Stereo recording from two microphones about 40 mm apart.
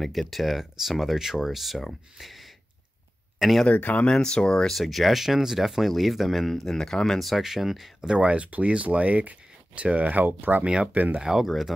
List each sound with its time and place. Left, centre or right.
0.0 s speech: centre
3.6 s speech: left
4.0 s speech: centre
7.2 s speech: centre
8.2 s speech: right
10.1 s speech: right
10.6 s speech: right
10.9 s speech: right
11.1 s speech: centre